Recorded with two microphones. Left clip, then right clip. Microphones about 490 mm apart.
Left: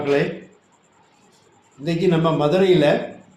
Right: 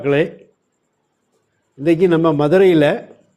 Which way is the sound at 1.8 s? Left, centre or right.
Right.